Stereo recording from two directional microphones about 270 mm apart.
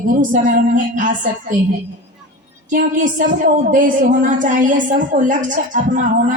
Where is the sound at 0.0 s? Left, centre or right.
Right.